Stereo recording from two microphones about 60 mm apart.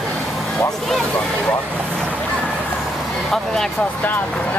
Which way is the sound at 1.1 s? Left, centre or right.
Centre.